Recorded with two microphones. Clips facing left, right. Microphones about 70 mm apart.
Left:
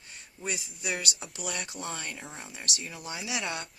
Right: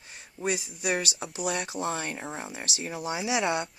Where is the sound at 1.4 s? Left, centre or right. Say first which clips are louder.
Right 6 dB; right.